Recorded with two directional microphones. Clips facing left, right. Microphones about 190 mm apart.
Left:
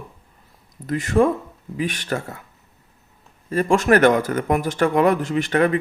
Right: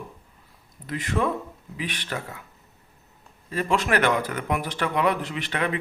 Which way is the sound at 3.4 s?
45° left (ahead or behind).